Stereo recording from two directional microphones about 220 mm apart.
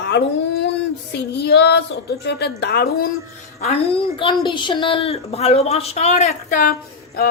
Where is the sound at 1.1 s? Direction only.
50° left (ahead or behind).